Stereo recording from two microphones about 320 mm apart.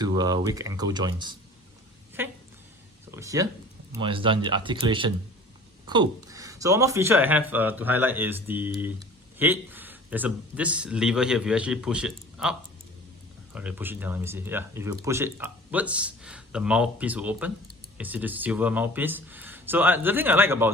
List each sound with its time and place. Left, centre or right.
0.0 s speech: centre
2.2 s a sound: centre
3.1 s a man's voice: centre